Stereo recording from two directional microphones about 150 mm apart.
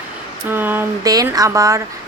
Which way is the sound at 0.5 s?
15° right (ahead or behind).